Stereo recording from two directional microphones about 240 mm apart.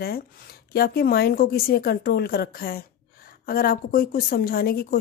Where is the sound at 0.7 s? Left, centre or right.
Left.